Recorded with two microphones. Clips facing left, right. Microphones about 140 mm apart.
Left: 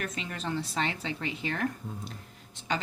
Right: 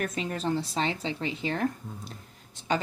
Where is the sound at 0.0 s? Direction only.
40° right (ahead or behind).